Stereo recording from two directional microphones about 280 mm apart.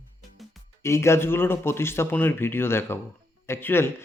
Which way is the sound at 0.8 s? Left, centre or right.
Centre.